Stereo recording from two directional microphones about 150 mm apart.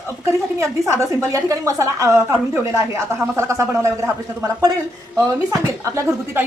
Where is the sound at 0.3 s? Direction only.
20° right (ahead or behind).